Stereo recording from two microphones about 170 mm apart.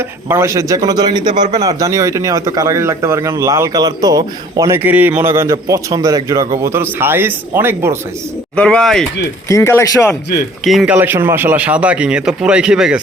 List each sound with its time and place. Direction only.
0.3 s a man's voice: 15° right (ahead or behind)
4.8 s a man's voice: 10° right (ahead or behind)
8.5 s speech: 5° left (ahead or behind)
9.5 s speech: 15° left (ahead or behind)
10.6 s speech: centre (ahead or behind)
10.9 s a man's voice: 10° right (ahead or behind)